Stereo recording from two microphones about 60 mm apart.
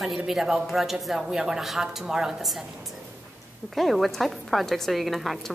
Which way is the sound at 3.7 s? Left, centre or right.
Centre.